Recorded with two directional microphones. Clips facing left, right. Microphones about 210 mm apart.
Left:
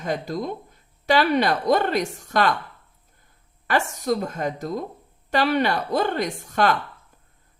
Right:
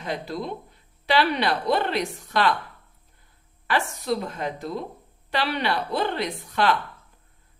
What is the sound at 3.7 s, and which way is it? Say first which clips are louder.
A woman's voice: left 2 dB; 45° left (ahead or behind).